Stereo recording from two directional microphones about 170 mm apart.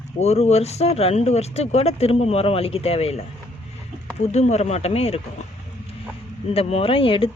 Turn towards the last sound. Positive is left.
turn(degrees=30)  # may be behind; listen again after turning